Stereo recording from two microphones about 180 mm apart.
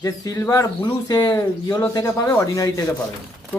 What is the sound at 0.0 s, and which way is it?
Speech, 20° left (ahead or behind).